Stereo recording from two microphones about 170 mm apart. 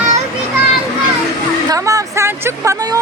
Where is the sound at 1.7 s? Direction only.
20° right (ahead or behind).